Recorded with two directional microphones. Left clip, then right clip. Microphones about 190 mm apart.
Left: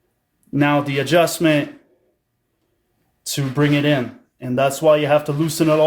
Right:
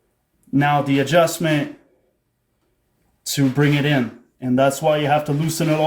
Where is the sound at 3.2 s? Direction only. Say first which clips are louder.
Right 1 dB; 20° left (ahead or behind).